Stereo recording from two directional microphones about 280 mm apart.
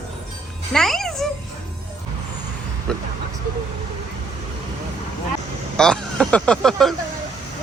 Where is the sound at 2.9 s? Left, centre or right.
Centre.